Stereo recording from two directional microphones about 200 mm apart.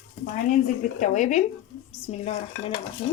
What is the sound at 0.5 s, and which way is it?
Speech, 40° left (ahead or behind).